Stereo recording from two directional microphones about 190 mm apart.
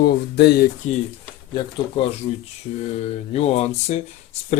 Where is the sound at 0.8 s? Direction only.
40° left (ahead or behind).